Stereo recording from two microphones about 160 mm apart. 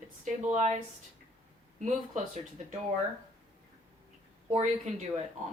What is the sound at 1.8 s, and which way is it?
Speech, 45° right (ahead or behind).